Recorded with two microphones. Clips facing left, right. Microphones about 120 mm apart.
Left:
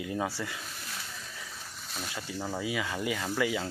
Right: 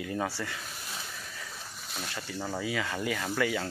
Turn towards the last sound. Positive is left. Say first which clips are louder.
# even
turn(degrees=15)  # may be behind; listen again after turning